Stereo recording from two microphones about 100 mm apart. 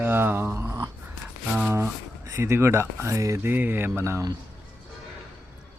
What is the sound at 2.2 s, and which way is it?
Speech, 30° right (ahead or behind).